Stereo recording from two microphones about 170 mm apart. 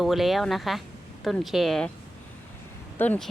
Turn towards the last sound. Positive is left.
turn(degrees=10)  # may be behind; listen again after turning